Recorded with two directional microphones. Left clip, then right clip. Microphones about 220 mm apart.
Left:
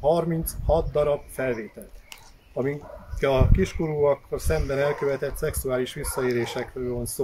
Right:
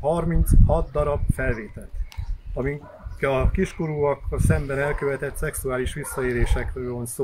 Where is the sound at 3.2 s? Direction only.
10° left (ahead or behind).